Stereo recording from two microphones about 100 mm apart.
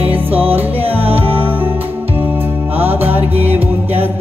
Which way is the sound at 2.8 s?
20° right (ahead or behind).